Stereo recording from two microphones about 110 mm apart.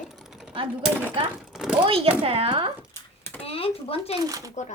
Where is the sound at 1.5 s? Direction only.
5° right (ahead or behind).